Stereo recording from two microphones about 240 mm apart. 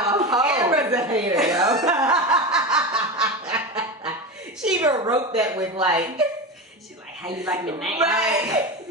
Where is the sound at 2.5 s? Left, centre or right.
Centre.